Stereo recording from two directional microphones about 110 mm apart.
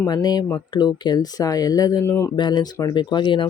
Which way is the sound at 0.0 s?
40° left (ahead or behind).